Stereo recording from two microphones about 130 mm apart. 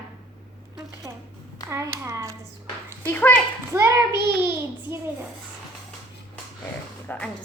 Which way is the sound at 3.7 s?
20° right (ahead or behind).